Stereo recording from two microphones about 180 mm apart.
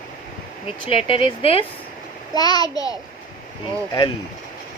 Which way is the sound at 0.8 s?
30° left (ahead or behind).